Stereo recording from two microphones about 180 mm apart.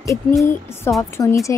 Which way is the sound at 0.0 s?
15° left (ahead or behind).